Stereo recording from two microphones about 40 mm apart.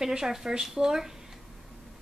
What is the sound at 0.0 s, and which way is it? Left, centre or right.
A woman's voice, centre.